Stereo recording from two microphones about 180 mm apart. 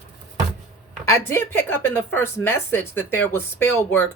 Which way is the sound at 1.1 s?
15° left (ahead or behind).